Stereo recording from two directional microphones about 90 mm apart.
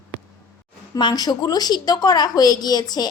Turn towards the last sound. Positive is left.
turn(degrees=50)  # may be behind; listen again after turning